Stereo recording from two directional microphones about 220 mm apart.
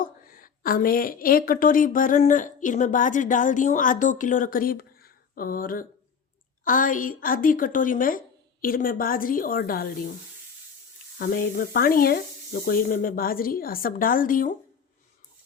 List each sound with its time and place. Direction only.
0.0 s a woman's voice: 40° left (ahead or behind)
11.2 s speech: 40° left (ahead or behind)